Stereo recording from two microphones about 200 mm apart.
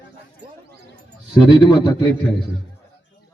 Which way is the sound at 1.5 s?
20° left (ahead or behind).